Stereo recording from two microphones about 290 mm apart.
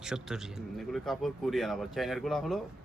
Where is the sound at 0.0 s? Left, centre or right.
Centre.